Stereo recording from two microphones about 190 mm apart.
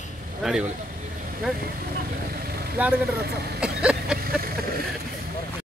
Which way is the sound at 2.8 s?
10° right (ahead or behind).